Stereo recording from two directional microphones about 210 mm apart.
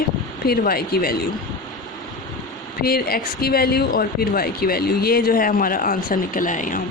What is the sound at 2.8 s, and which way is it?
Speech, 45° left (ahead or behind).